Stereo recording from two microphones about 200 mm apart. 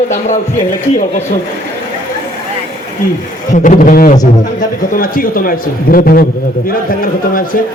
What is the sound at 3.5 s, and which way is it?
A man's voice, 40° left (ahead or behind).